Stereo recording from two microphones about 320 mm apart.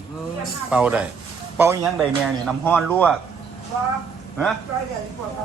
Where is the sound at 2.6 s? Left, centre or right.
Centre.